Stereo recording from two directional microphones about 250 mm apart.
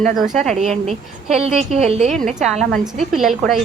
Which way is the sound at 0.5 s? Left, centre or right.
Right.